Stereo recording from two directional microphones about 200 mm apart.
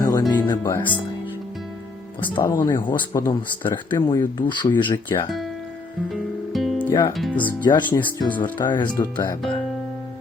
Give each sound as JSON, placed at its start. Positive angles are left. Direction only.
{"t": 0.0, "sound": "speech", "side_deg": 20}
{"t": 2.4, "sound": "speech", "side_deg": 20}
{"t": 6.5, "sound": "music", "side_deg": 0}
{"t": 7.1, "sound": "speech", "side_deg": 0}
{"t": 7.6, "sound": "speech", "side_deg": 20}
{"t": 7.9, "sound": "speech", "side_deg": 10}
{"t": 8.6, "sound": "speech", "side_deg": 20}